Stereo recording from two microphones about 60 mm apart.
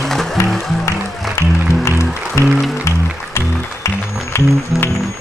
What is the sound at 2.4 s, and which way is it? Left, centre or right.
Music, left.